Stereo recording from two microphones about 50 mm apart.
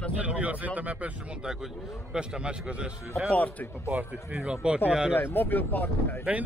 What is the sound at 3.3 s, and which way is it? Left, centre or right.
Speech, left.